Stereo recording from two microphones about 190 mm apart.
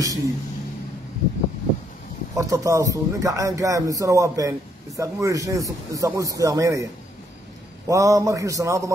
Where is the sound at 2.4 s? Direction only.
15° right (ahead or behind).